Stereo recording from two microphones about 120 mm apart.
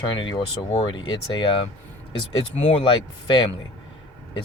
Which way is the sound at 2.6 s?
45° left (ahead or behind).